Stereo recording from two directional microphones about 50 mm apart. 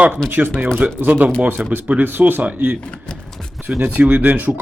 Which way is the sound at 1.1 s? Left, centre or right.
Right.